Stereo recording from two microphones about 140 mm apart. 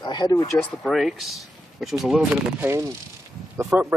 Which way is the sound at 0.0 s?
30° left (ahead or behind).